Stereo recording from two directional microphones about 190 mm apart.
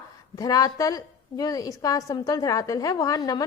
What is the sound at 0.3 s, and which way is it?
A woman's voice, 20° left (ahead or behind).